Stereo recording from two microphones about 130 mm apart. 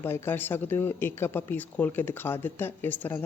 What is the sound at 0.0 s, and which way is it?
Speech, 15° left (ahead or behind).